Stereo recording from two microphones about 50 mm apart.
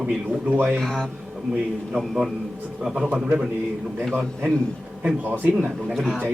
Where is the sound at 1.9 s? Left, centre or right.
Centre.